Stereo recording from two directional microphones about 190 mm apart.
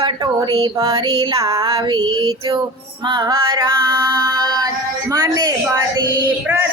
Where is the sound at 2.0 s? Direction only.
90° right.